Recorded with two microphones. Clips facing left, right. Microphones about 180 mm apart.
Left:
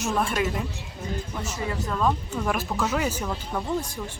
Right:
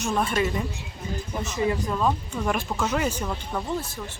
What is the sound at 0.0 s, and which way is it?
Speech, centre (ahead or behind).